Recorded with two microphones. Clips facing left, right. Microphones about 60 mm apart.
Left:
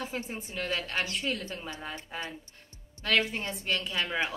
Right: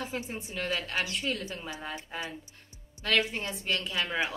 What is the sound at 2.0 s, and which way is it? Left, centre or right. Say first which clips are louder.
Speech: right 1 dB; centre.